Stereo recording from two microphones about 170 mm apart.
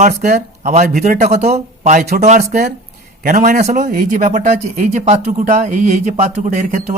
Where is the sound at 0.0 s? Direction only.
45° right (ahead or behind).